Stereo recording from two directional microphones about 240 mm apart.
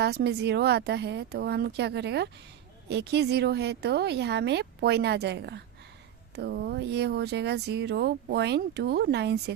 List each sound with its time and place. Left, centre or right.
0.0 s speech: right